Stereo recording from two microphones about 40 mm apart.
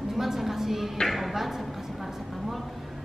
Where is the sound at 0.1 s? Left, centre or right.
Centre.